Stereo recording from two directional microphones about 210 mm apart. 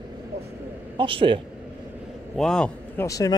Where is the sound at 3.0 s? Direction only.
15° left (ahead or behind).